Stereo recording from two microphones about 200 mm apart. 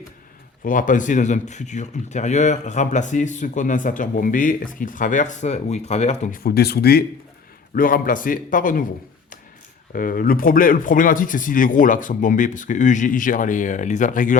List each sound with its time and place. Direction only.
0.6 s a man's voice: 40° left (ahead or behind)
9.9 s speech: 45° left (ahead or behind)